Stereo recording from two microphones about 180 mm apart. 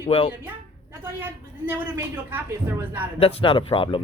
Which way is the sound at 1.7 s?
10° right (ahead or behind).